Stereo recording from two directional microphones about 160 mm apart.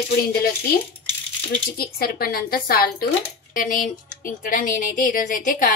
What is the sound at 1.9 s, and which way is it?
A woman's voice, 70° left (ahead or behind).